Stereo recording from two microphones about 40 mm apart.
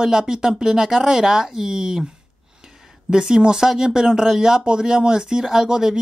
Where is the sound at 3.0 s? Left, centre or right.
Centre.